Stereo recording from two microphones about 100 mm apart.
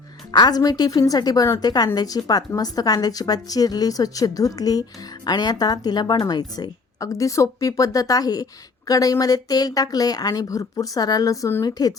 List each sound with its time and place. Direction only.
0.3 s speech: 45° left (ahead or behind)